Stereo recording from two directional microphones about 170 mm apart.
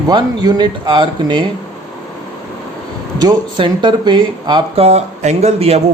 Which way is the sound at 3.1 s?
25° right (ahead or behind).